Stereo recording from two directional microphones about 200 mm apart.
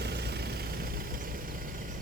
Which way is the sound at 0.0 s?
55° right (ahead or behind).